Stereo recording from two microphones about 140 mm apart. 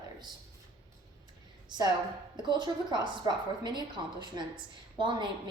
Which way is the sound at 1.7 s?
35° right (ahead or behind).